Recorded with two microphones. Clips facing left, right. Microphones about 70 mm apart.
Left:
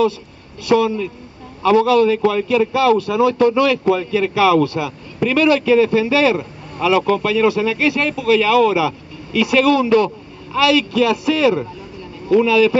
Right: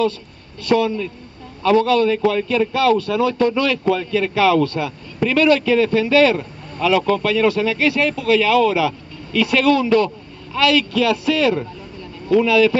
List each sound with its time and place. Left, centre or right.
0.7 s a man's voice: centre